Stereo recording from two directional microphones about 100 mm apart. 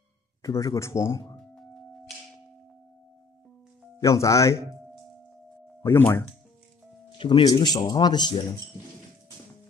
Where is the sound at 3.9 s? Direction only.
30° left (ahead or behind).